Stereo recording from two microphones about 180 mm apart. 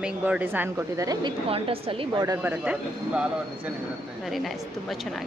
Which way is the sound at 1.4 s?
30° right (ahead or behind).